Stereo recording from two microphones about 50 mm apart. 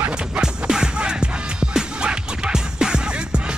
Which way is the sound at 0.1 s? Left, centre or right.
Centre.